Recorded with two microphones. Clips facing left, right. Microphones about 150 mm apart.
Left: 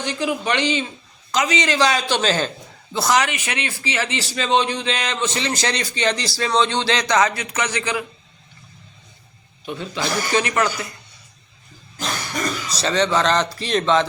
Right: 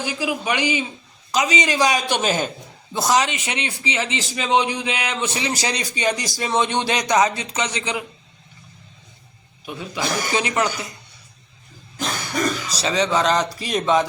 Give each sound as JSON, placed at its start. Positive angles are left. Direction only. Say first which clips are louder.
{"t": 0.0, "sound": "a man's voice", "louder": "left 1 dB", "side_deg": -5}
{"t": 9.6, "sound": "a man's voice", "louder": "left 1 dB", "side_deg": -10}
{"t": 12.8, "sound": "a man's voice", "louder": "left 1 dB", "side_deg": -5}